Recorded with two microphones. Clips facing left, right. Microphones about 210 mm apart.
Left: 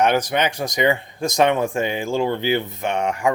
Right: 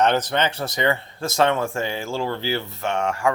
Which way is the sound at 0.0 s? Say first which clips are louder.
Left 1 dB; 10° left (ahead or behind).